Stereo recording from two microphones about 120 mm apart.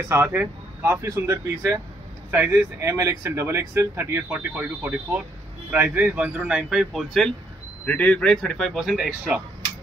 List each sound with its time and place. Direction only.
0.1 s a man's voice: 20° right (ahead or behind); by 7.3 s centre (ahead or behind)
7.8 s speech: 15° left (ahead or behind); by 9.4 s 5° right (ahead or behind)